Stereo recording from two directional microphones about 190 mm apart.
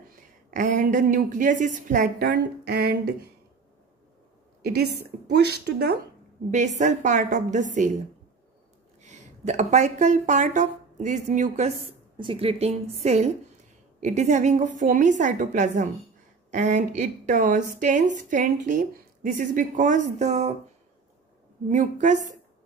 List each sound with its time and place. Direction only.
0.5 s a woman's voice: 45° right (ahead or behind)
2.2 s speech: 60° right (ahead or behind)
5.3 s speech: 60° right (ahead or behind)
6.5 s speech: 40° right (ahead or behind)
9.0 s speech: 40° right (ahead or behind)
21.6 s speech: 40° right (ahead or behind)